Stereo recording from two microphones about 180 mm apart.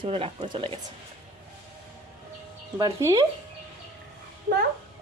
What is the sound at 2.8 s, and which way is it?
Speech, 20° right (ahead or behind).